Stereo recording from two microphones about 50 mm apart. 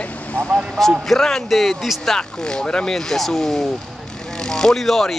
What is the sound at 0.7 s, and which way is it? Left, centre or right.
Speech, centre.